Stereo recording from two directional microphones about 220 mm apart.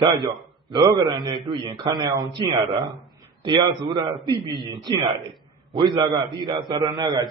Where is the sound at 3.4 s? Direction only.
20° right (ahead or behind).